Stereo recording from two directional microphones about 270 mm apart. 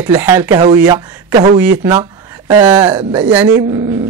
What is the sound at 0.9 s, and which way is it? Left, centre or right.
Speech, right.